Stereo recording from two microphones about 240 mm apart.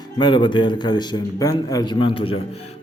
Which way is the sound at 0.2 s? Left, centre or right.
Centre.